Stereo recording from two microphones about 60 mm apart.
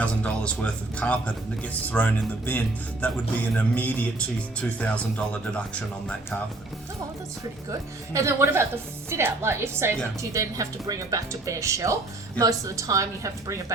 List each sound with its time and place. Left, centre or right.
0.0 s speech: left
7.7 s speech: right
10.3 s speech: right
12.4 s speech: right